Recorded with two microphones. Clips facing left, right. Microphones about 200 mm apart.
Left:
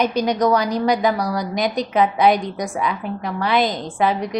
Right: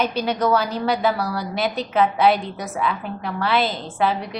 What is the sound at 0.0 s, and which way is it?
A woman's voice, 15° left (ahead or behind).